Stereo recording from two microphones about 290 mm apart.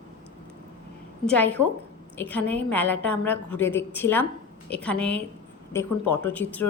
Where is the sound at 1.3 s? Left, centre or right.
Centre.